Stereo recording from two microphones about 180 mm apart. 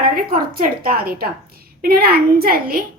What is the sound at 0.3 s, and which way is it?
A woman's voice, 50° right (ahead or behind).